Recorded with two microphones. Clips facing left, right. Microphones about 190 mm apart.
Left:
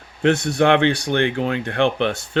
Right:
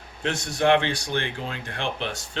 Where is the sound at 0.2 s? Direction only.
60° left (ahead or behind).